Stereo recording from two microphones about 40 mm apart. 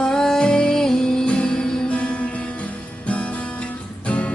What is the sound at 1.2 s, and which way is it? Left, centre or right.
Music, left.